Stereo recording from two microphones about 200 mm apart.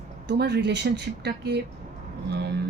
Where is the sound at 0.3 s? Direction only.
55° right (ahead or behind).